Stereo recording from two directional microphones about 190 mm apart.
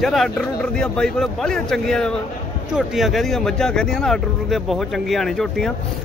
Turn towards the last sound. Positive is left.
turn(degrees=0)  # may be behind; listen again after turning